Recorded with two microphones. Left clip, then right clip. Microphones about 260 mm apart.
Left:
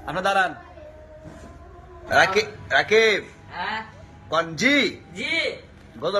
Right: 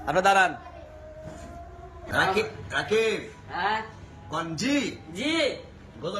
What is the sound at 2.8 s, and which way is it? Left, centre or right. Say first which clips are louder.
Speech: left 6 dB; centre.